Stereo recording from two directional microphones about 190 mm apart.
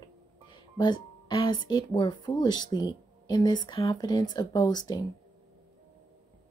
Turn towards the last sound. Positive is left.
turn(degrees=20)  # may be behind; listen again after turning